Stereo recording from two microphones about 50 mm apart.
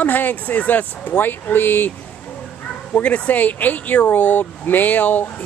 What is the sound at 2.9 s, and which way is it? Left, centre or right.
Speech, left.